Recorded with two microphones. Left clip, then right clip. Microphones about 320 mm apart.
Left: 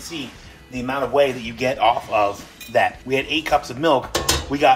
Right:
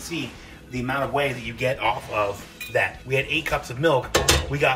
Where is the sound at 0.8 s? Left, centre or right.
Left.